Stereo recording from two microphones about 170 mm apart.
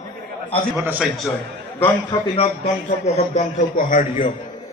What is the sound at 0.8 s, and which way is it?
Speech, 5° right (ahead or behind).